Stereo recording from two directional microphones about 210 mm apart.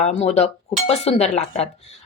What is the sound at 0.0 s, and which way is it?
A woman's voice, 30° left (ahead or behind).